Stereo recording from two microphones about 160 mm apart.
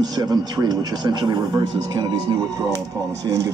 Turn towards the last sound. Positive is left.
turn(degrees=-20)  # may be behind; listen again after turning